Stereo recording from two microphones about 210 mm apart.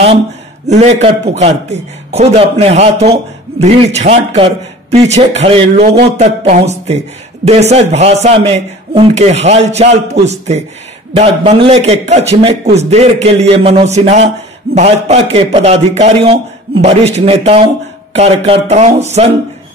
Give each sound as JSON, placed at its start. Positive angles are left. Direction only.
{"t": 0.7, "sound": "a man's voice", "side_deg": -30}